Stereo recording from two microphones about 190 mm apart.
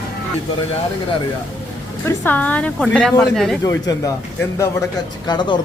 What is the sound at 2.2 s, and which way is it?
A woman's voice, 10° left (ahead or behind).